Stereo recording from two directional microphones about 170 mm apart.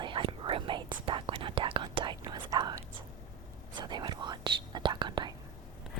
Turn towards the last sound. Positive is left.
turn(degrees=-25)  # may be behind; listen again after turning